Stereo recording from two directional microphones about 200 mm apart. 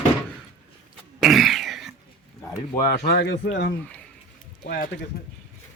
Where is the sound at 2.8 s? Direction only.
50° left (ahead or behind).